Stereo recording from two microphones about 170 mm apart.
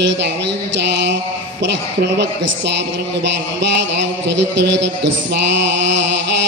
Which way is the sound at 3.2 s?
90° right.